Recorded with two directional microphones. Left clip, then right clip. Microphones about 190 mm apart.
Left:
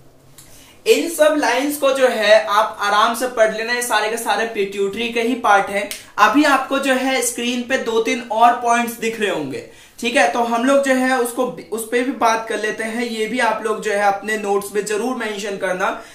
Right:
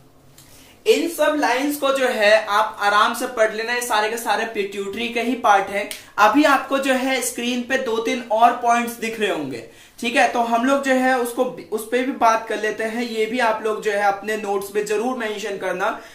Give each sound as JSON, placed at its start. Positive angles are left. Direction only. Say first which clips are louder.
{"t": 1.4, "sound": "speech", "louder": "left 3 dB", "side_deg": -20}